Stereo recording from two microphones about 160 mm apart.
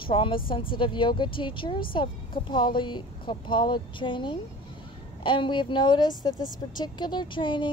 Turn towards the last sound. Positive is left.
turn(degrees=30)  # may be behind; listen again after turning